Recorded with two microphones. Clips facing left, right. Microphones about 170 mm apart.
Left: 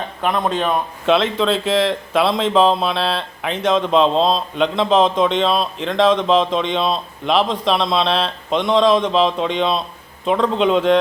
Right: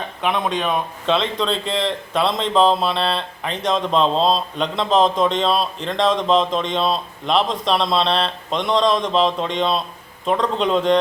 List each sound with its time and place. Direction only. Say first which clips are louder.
0.2 s speech: left 2 dB; centre (ahead or behind)